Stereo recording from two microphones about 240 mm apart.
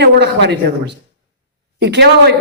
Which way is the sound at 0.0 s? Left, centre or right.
Right.